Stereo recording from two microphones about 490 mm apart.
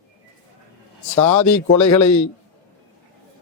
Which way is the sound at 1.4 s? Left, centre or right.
Left.